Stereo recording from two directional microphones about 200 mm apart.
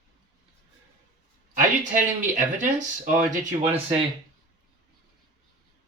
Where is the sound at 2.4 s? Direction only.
40° right (ahead or behind).